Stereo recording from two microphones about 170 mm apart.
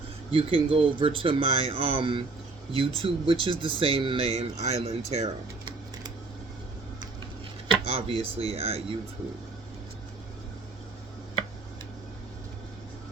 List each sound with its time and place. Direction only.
0.3 s speech: 30° right (ahead or behind)
7.7 s speech: 35° right (ahead or behind)